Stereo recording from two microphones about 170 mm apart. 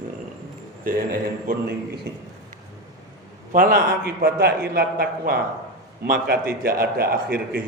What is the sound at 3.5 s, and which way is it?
A man's voice, 55° right (ahead or behind).